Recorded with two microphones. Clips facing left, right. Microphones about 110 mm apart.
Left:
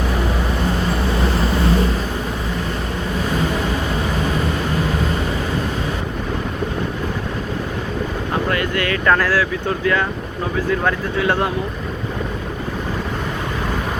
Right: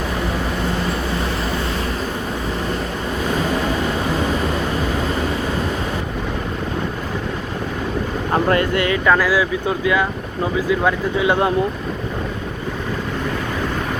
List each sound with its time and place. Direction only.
8.4 s speech: 25° right (ahead or behind)
9.0 s speech: 5° right (ahead or behind)